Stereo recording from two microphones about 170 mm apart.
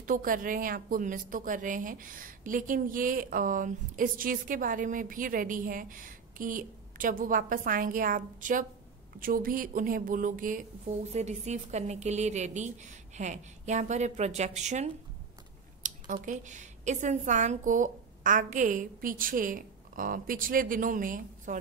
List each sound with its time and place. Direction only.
0.0 s a woman's voice: 55° right (ahead or behind)